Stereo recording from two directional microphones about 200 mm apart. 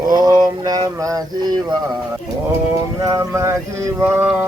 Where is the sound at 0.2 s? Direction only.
20° right (ahead or behind).